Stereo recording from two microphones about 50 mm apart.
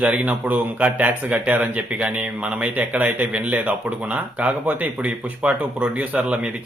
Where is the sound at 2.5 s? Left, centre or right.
Right.